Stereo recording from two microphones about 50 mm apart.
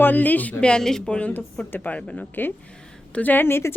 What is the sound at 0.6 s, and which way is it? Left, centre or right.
Speech, centre.